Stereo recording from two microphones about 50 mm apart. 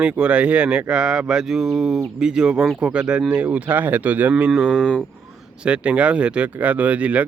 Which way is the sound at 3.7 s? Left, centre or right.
Right.